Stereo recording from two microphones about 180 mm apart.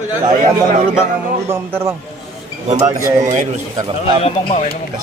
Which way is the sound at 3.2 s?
45° right (ahead or behind).